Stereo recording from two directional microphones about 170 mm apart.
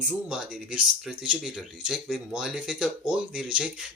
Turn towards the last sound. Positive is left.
turn(degrees=-5)  # may be behind; listen again after turning